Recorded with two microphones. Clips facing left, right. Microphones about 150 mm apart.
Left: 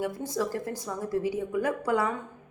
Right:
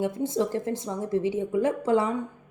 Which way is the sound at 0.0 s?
25° right (ahead or behind).